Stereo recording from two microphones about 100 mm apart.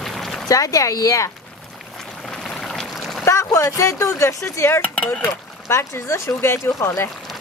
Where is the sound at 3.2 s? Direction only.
30° left (ahead or behind).